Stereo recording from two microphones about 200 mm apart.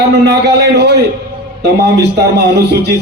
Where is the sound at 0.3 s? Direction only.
55° right (ahead or behind).